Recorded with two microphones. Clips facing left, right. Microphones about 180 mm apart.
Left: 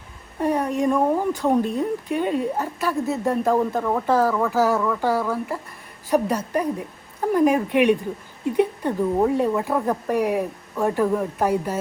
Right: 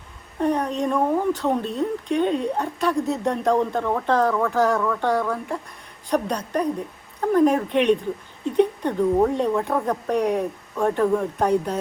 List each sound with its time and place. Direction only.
0.3 s speech: 5° left (ahead or behind)